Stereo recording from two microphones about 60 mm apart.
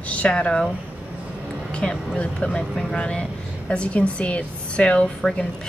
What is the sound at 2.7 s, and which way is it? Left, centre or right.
A woman's voice, centre.